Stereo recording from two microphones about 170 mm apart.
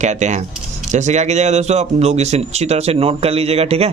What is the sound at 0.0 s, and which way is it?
Speech, 45° right (ahead or behind).